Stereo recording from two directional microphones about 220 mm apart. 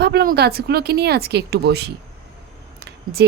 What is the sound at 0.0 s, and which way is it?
Speech, 45° right (ahead or behind).